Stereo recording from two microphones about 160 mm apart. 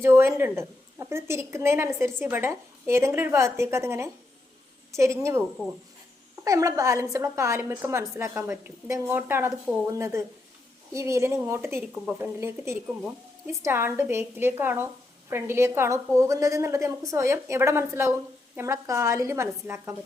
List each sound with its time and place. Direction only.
0.0 s a woman's voice: 15° right (ahead or behind)
6.4 s a woman's voice: 20° right (ahead or behind)